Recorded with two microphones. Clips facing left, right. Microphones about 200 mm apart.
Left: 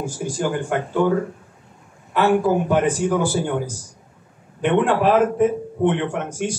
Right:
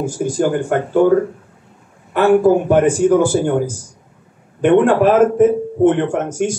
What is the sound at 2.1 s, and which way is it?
Speech, 50° right (ahead or behind).